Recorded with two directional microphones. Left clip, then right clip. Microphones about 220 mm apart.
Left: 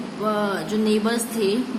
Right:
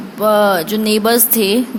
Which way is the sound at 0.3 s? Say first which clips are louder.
Right 12 dB; 40° right (ahead or behind).